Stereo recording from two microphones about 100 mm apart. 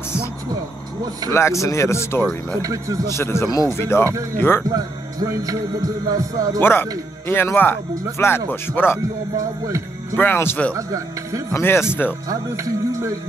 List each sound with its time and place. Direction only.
1.3 s speech: 30° left (ahead or behind)
2.6 s music: 35° right (ahead or behind)
3.1 s speech: 25° left (ahead or behind)
4.0 s music: 30° right (ahead or behind)
4.4 s speech: 20° left (ahead or behind)
4.6 s music: 35° right (ahead or behind)
6.6 s speech: 20° left (ahead or behind)
9.4 s music: 35° right (ahead or behind)
10.1 s speech: 20° left (ahead or behind)
10.7 s music: 35° right (ahead or behind)
11.5 s speech: 25° left (ahead or behind)
12.3 s music: 35° right (ahead or behind)